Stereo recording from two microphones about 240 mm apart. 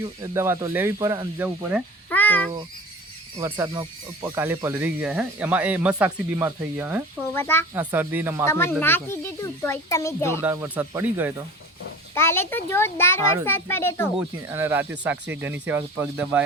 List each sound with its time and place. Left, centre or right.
0.2 s speech: centre
2.0 s speech: centre
3.3 s speech: centre
7.3 s a child's voice: centre
7.9 s speech: centre
8.4 s a child's voice: centre
10.4 s speech: centre
12.1 s a child's voice: centre
14.2 s speech: centre